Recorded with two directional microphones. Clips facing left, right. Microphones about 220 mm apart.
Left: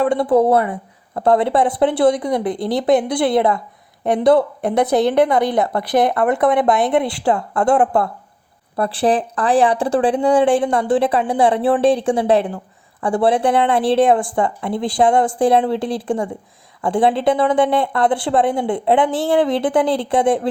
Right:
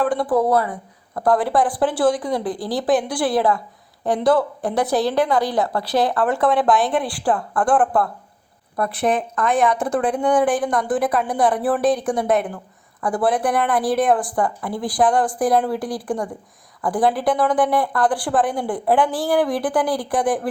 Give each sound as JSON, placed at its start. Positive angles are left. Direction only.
{"t": 0.0, "sound": "a woman's voice", "side_deg": 25}